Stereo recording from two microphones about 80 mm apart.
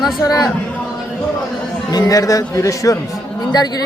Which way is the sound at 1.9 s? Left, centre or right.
Left.